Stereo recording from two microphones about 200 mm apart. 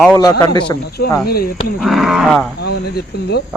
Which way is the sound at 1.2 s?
50° left (ahead or behind).